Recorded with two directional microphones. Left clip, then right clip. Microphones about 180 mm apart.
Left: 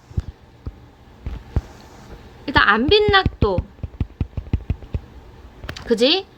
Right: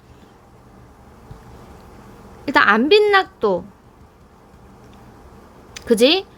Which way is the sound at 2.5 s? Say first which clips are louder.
Right 1 dB; 25° right (ahead or behind).